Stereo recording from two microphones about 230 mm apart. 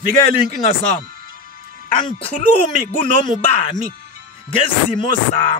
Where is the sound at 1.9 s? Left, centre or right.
Left.